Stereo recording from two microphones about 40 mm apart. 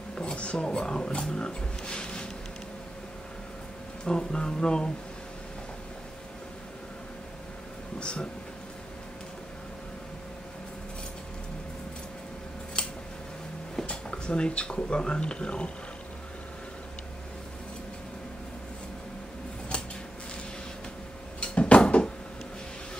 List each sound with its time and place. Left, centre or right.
0.1 s speech: left
4.0 s speech: left
8.0 s speech: left
12.8 s a sound: left
13.8 s speech: left
21.4 s a sound: left